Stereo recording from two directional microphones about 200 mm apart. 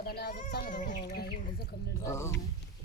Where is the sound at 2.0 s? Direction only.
15° left (ahead or behind).